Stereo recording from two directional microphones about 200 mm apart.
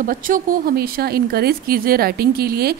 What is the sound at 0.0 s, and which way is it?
Speech, 45° right (ahead or behind).